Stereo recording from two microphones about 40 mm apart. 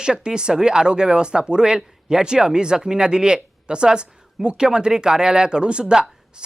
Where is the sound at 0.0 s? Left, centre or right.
Right.